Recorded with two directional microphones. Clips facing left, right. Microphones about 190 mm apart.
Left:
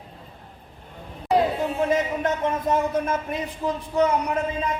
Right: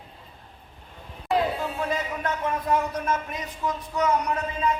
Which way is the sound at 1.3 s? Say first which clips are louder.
Left 4 dB; 20° left (ahead or behind).